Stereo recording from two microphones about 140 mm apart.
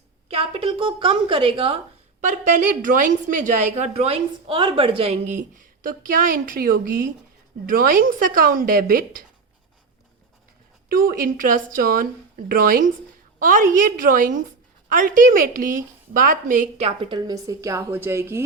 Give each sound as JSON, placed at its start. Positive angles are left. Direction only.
{"t": 0.3, "sound": "a woman's voice", "side_deg": -45}
{"t": 2.2, "sound": "a woman's voice", "side_deg": -65}
{"t": 10.8, "sound": "speech", "side_deg": -90}
{"t": 13.4, "sound": "a woman's voice", "side_deg": -75}
{"t": 16.7, "sound": "a woman's voice", "side_deg": -45}